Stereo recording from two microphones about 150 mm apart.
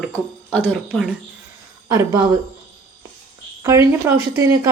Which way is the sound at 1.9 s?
25° right (ahead or behind).